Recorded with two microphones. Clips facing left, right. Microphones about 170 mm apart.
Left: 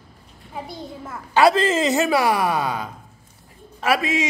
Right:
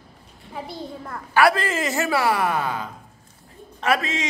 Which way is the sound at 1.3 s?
20° left (ahead or behind).